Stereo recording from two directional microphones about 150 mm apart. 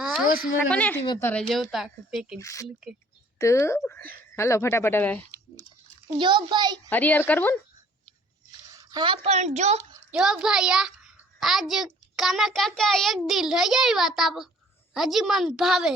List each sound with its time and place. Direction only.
0.0 s a sound: 5° right (ahead or behind)
0.7 s a child's voice: 10° left (ahead or behind)
2.4 s speech: 20° left (ahead or behind)
6.1 s a child's voice: 30° right (ahead or behind)
6.9 s speech: 10° left (ahead or behind)
8.8 s a sound: 30° right (ahead or behind)
9.2 s a woman's voice: 50° right (ahead or behind)
10.1 s a child's voice: 5° right (ahead or behind)